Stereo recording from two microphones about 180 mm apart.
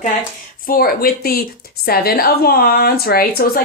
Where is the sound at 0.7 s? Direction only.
55° left (ahead or behind).